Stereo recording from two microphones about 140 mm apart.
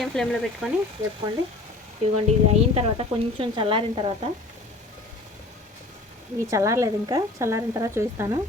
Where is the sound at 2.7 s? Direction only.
45° right (ahead or behind).